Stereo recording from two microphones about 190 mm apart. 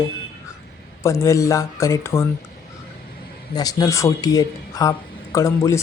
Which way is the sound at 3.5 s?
20° left (ahead or behind).